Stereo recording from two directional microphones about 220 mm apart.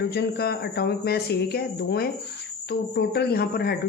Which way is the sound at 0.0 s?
45° left (ahead or behind).